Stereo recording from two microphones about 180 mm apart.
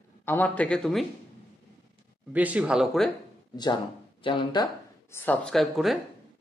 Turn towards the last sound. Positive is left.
turn(degrees=0)  # may be behind; listen again after turning